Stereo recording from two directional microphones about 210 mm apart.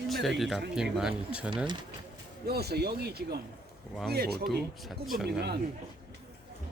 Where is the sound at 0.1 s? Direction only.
Centre (ahead or behind).